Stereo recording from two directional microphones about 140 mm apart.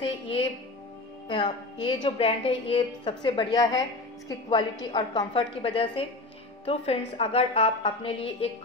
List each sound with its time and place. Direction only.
0.0 s a woman's voice: 40° left (ahead or behind)